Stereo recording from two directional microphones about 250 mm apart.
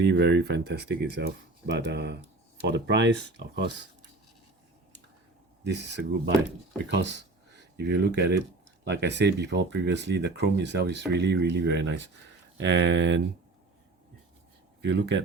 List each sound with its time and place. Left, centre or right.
0.0 s speech: right
5.6 s speech: right
14.8 s speech: right